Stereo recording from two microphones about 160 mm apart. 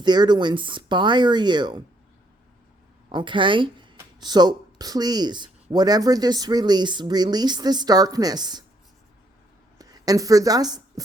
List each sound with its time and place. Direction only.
0.0 s speech: 25° right (ahead or behind)
3.1 s a woman's voice: 30° right (ahead or behind)
9.7 s a woman's voice: 25° right (ahead or behind)